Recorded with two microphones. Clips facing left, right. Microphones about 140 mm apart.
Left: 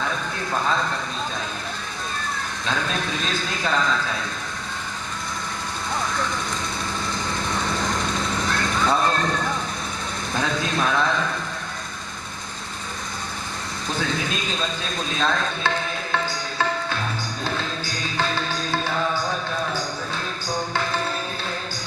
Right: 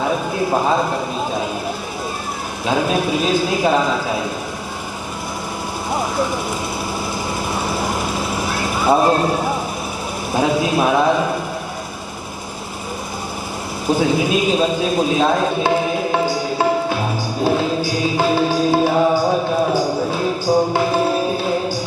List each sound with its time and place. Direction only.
0.0 s a sound: 15° right (ahead or behind)
0.7 s speech: 15° right (ahead or behind)
2.6 s speech: 10° right (ahead or behind)
5.9 s vehicle: 10° right (ahead or behind)
7.5 s vehicle: 10° right (ahead or behind)
10.3 s speech: 10° right (ahead or behind)
13.8 s a man's voice: 10° right (ahead or behind)
19.2 s music: 30° right (ahead or behind)
19.7 s a sound: 5° right (ahead or behind)
20.1 s music: 10° right (ahead or behind)